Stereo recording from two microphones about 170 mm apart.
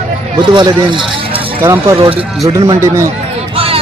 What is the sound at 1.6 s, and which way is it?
Speech, 15° right (ahead or behind).